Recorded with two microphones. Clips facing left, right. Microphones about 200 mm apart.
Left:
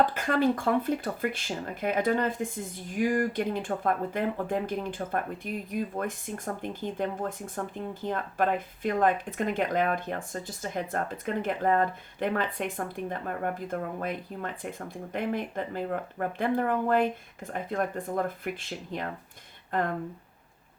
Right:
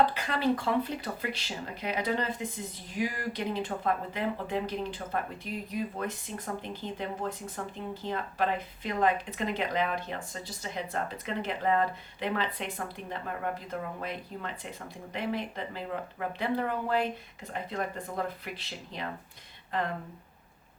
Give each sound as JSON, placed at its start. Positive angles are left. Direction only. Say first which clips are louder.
{"t": 0.0, "sound": "speech", "louder": "left 3 dB", "side_deg": 45}